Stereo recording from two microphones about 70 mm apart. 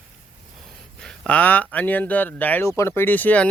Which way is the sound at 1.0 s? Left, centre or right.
Centre.